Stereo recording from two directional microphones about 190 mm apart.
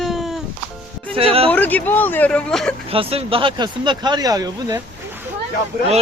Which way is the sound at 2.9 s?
30° right (ahead or behind).